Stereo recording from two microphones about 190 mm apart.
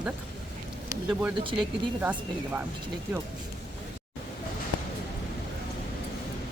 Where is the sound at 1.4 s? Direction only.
25° right (ahead or behind).